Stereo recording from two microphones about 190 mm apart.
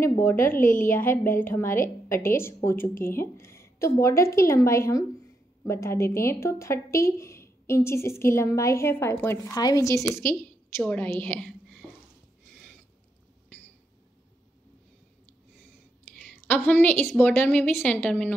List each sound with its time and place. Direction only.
0.0 s a woman's voice: 15° left (ahead or behind)
0.6 s a woman's voice: 45° left (ahead or behind)
0.8 s a woman's voice: 10° left (ahead or behind)
16.4 s a woman's voice: 10° left (ahead or behind)